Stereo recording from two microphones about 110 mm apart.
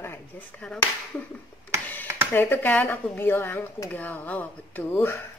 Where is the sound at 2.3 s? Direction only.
20° left (ahead or behind).